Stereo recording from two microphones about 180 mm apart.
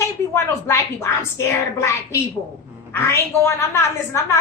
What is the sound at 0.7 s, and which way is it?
A woman's voice, 15° left (ahead or behind).